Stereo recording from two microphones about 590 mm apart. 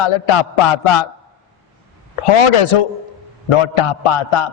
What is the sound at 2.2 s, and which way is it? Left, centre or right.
A man's voice, left.